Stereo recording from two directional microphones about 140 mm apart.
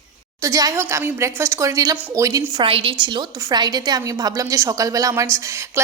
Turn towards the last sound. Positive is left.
turn(degrees=-20)  # may be behind; listen again after turning